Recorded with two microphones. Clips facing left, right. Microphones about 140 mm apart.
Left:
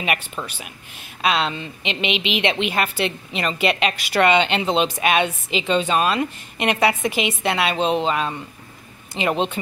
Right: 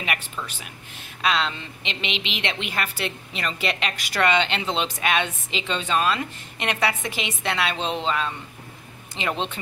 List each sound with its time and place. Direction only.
0.4 s speech: 40° left (ahead or behind)
1.2 s a woman's voice: 15° left (ahead or behind)